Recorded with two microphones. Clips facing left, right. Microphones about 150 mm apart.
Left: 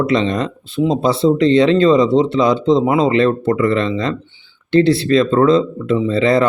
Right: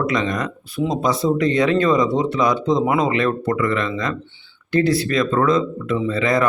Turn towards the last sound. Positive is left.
turn(degrees=30)  # may be behind; listen again after turning